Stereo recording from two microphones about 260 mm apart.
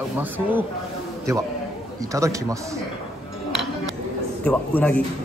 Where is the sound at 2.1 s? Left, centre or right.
Centre.